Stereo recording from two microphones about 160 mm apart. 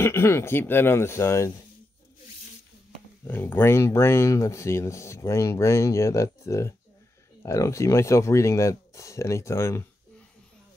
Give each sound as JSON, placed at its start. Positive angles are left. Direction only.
{"t": 0.0, "sound": "speech", "side_deg": 15}
{"t": 3.3, "sound": "speech", "side_deg": 15}